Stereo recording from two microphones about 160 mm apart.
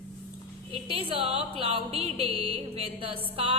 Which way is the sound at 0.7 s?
35° right (ahead or behind).